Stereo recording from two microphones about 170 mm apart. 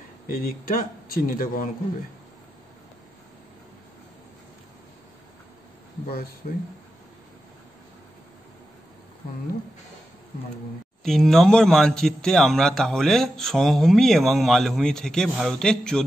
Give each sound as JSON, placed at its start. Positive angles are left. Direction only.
{"t": 0.3, "sound": "a man's voice", "side_deg": 60}
{"t": 11.1, "sound": "a man's voice", "side_deg": 0}